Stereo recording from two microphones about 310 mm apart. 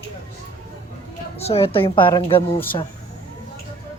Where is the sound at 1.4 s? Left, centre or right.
Centre.